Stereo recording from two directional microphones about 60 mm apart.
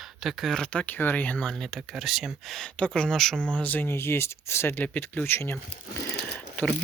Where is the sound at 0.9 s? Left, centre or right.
Left.